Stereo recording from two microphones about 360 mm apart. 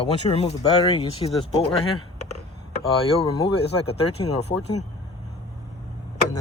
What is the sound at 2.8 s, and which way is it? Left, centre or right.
Speech, centre.